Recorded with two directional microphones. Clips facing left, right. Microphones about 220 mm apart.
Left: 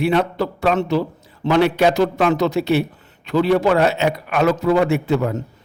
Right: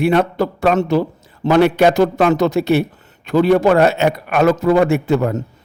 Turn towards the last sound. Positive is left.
turn(degrees=-50)  # may be behind; listen again after turning